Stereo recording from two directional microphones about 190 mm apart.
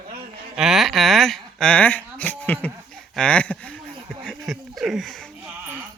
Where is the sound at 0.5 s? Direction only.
Centre (ahead or behind).